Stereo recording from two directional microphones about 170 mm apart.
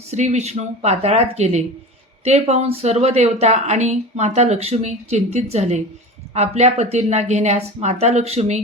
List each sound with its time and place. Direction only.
0.1 s speech: 40° right (ahead or behind)